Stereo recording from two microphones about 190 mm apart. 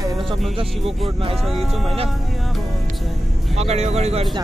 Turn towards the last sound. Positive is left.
turn(degrees=-35)  # may be behind; listen again after turning